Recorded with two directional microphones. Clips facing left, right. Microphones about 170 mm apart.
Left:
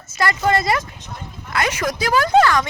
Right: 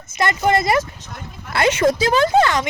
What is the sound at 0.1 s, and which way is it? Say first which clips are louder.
Speech: right 1 dB; 20° right (ahead or behind).